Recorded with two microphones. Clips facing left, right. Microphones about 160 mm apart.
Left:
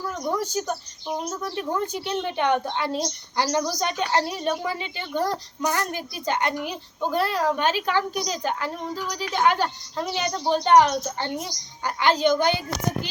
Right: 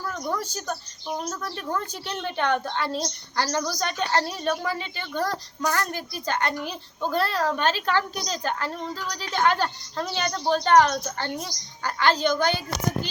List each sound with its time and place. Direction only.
0.1 s speech: 15° left (ahead or behind)